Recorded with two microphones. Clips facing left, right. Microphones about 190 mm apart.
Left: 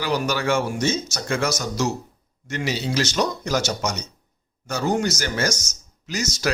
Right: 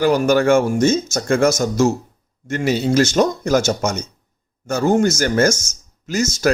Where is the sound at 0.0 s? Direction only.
50° right (ahead or behind).